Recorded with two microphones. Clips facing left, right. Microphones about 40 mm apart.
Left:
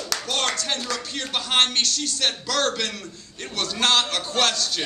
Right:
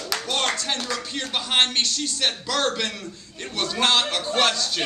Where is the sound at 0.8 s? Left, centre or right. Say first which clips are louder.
Even; centre.